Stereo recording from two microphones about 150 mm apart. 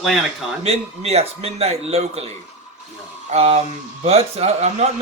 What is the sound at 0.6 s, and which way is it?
A man's voice, 45° right (ahead or behind).